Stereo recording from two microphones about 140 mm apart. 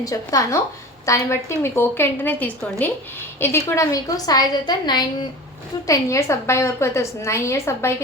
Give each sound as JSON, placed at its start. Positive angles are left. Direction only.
{"t": 0.0, "sound": "a woman's voice", "side_deg": 25}